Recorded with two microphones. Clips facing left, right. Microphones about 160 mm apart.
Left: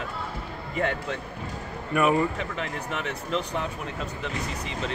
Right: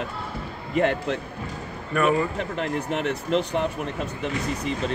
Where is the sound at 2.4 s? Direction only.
60° right (ahead or behind).